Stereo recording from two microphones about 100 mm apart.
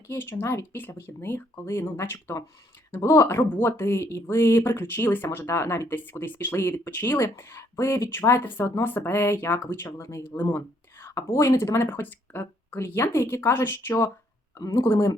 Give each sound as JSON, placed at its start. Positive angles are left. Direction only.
{"t": 0.1, "sound": "speech", "side_deg": 20}